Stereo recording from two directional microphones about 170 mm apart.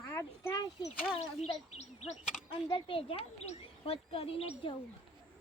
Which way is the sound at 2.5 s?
30° left (ahead or behind).